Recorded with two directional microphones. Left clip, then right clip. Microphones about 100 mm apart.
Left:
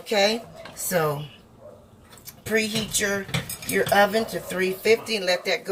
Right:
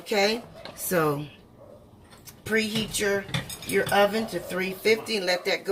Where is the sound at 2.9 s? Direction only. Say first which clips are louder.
Even; centre (ahead or behind).